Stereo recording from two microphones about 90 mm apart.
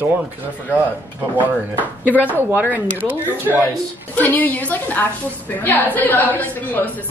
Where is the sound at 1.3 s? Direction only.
20° right (ahead or behind).